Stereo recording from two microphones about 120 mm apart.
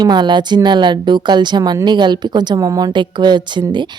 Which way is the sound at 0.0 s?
35° right (ahead or behind).